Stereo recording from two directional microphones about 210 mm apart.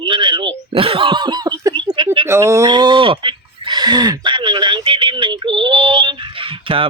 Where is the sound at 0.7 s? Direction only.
25° right (ahead or behind).